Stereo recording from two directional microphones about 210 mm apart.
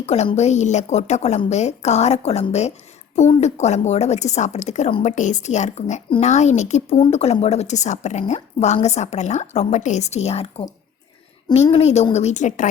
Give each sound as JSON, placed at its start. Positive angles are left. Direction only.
{"t": 0.0, "sound": "a woman's voice", "side_deg": 30}
{"t": 11.7, "sound": "a woman's voice", "side_deg": 30}